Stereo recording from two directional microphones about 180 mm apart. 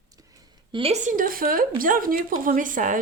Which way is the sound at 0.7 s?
30° right (ahead or behind).